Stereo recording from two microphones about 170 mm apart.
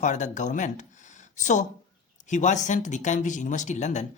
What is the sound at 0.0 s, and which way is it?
Speech, 45° left (ahead or behind).